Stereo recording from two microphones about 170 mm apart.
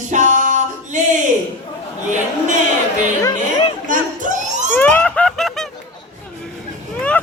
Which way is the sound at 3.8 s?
50° right (ahead or behind).